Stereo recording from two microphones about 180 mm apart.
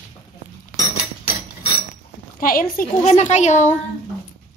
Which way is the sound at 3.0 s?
40° left (ahead or behind).